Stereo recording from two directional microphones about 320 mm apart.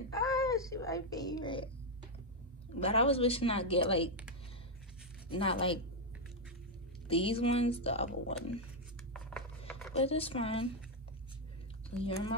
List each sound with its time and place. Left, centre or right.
0.1 s speech: centre
2.8 s speech: centre
5.3 s speech: centre
7.1 s speech: centre
9.9 s speech: centre
12.0 s speech: centre